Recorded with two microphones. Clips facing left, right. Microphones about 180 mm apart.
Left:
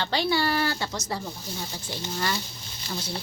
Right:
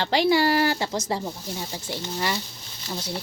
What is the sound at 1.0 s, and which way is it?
Speech, 25° right (ahead or behind).